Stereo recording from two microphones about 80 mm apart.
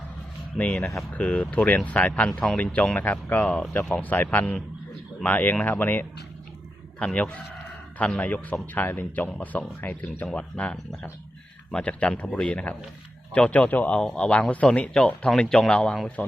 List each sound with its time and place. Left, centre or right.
0.5 s speech: centre
3.4 s speech: centre
4.0 s speech: left